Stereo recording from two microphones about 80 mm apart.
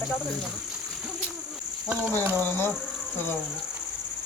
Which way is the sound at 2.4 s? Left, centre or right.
Left.